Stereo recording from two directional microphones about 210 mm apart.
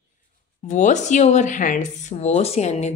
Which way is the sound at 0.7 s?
35° left (ahead or behind).